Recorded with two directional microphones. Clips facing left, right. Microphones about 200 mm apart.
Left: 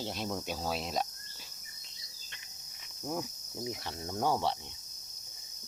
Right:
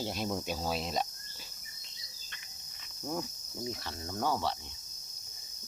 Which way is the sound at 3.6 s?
15° left (ahead or behind).